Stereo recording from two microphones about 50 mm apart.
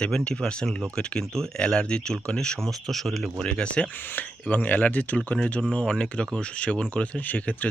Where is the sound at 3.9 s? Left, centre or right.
Left.